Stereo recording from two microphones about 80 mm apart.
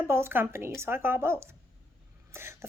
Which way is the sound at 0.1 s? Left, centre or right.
Right.